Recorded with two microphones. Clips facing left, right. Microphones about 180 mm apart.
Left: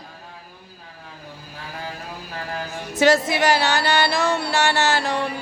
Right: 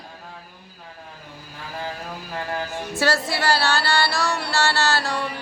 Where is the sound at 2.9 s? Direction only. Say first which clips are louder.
Left 6 dB; 20° left (ahead or behind).